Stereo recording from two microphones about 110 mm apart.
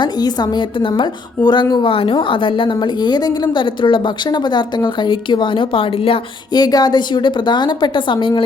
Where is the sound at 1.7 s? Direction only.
55° left (ahead or behind).